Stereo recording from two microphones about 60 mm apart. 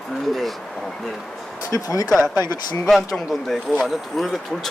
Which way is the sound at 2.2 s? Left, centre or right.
Right.